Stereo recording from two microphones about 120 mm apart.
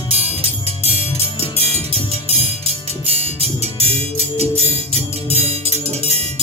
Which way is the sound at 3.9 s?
60° right (ahead or behind).